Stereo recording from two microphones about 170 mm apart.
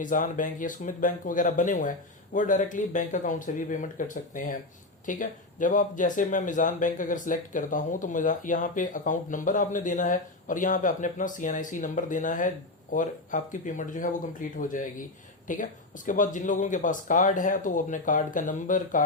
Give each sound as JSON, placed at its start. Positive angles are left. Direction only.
{"t": 0.0, "sound": "speech", "side_deg": 50}